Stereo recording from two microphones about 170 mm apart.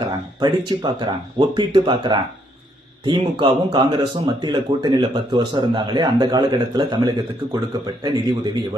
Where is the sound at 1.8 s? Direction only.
30° right (ahead or behind).